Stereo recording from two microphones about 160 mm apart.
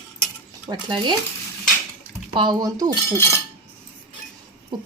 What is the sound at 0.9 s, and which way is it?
Speech, 30° right (ahead or behind).